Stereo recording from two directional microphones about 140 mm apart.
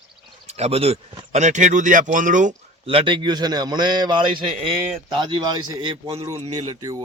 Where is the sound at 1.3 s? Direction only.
55° right (ahead or behind).